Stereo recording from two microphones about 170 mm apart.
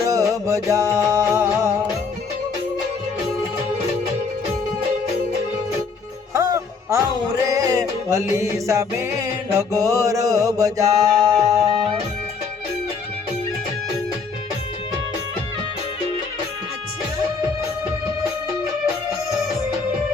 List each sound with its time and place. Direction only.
0.0 s music: 20° right (ahead or behind)
6.3 s music: 20° right (ahead or behind)